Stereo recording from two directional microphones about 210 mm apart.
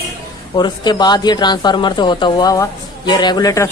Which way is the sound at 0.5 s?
20° left (ahead or behind).